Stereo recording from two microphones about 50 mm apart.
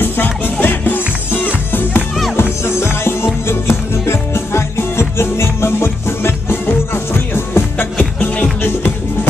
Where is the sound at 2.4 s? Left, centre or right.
Left.